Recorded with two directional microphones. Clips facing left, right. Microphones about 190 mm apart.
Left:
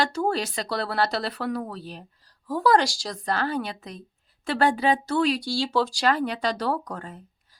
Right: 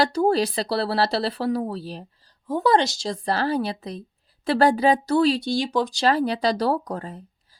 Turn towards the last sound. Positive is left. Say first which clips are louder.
# right 4 dB
turn(degrees=-35)  # may be behind; listen again after turning